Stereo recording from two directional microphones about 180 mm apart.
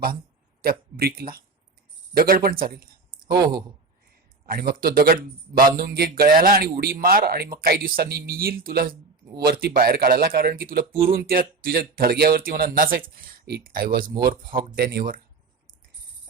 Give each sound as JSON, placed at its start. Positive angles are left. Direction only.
{"t": 0.6, "sound": "speech", "side_deg": -55}
{"t": 4.4, "sound": "speech", "side_deg": -55}